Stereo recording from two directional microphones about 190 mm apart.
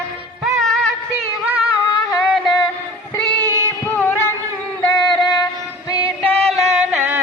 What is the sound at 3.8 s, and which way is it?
Music, 10° left (ahead or behind).